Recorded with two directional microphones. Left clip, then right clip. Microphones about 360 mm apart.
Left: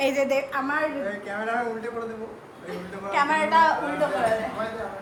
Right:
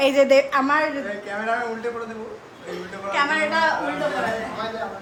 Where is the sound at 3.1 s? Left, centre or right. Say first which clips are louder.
Even; centre.